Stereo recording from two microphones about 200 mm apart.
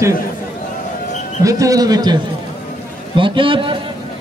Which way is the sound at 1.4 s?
15° right (ahead or behind).